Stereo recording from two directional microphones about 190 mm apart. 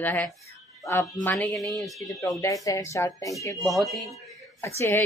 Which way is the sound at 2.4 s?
20° left (ahead or behind).